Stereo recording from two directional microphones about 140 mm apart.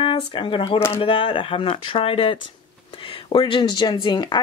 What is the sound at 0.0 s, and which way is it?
Speech, 35° left (ahead or behind).